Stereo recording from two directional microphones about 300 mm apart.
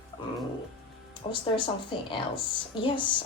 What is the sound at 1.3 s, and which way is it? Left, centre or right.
Speech, centre.